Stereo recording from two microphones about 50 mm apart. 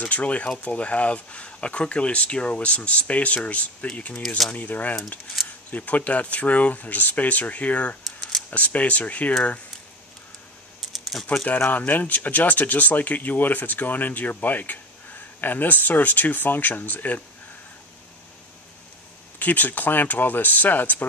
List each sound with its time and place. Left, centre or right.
0.1 s speech: left
8.0 s camera: centre
8.5 s speech: left
10.8 s typing: centre
11.7 s speech: left
19.3 s speech: left